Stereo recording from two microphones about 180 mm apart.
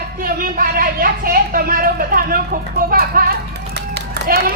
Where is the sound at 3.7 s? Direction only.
60° right (ahead or behind).